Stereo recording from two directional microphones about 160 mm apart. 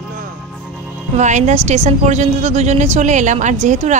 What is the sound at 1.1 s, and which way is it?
A woman's voice, 45° right (ahead or behind).